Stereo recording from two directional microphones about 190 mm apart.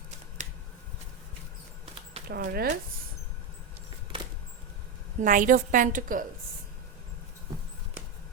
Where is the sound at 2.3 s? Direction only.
55° right (ahead or behind).